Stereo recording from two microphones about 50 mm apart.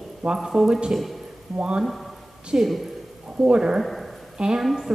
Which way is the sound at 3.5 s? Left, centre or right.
Centre.